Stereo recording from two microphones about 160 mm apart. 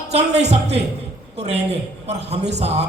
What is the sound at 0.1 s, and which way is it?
A man's voice, 40° right (ahead or behind).